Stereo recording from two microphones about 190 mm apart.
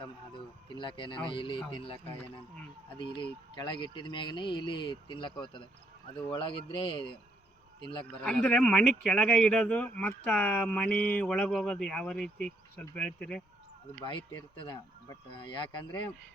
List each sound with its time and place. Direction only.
0.0 s speech: 25° left (ahead or behind)
8.2 s speech: 5° left (ahead or behind)
14.6 s speech: 25° left (ahead or behind)